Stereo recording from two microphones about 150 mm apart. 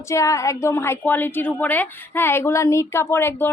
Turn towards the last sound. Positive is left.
turn(degrees=15)  # may be behind; listen again after turning